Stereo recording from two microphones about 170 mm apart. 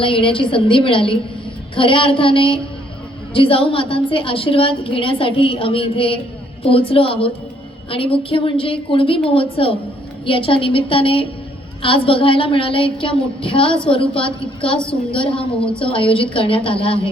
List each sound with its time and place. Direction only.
0.0 s a woman's voice: 30° left (ahead or behind)